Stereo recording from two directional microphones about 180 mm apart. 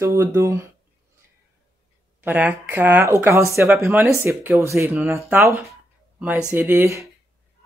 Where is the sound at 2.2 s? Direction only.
10° right (ahead or behind).